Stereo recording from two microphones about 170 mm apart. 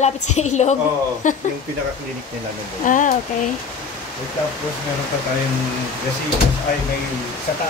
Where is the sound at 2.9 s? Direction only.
50° left (ahead or behind).